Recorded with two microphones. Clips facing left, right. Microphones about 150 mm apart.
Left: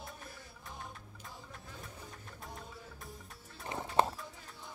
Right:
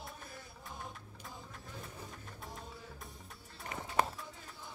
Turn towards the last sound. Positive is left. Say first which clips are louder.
# left 3 dB
turn(degrees=25)  # may be behind; listen again after turning